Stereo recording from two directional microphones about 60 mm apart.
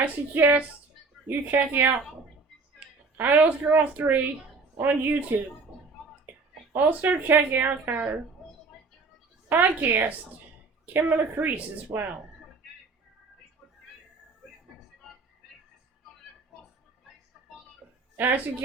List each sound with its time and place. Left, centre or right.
0.0 s a woman's voice: right
3.2 s a woman's voice: right
6.7 s speech: right
9.5 s a woman's voice: right
18.2 s a woman's voice: right